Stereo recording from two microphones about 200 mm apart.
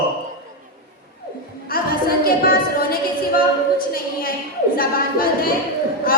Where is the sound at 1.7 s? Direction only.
45° left (ahead or behind).